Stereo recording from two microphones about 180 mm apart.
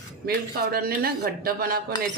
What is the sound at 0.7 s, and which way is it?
Speech, 55° right (ahead or behind).